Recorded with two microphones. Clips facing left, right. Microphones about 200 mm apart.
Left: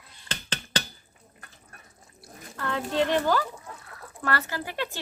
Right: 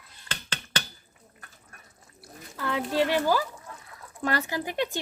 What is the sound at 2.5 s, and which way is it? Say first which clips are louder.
Speech: right 1 dB; 5° right (ahead or behind).